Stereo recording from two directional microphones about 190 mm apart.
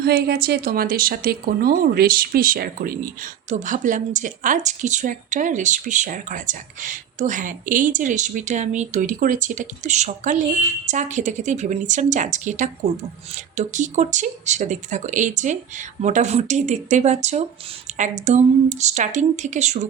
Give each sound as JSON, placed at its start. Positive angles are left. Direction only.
{"t": 0.0, "sound": "speech", "side_deg": -60}